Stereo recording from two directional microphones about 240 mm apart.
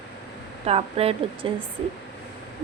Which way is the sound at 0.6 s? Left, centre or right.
Right.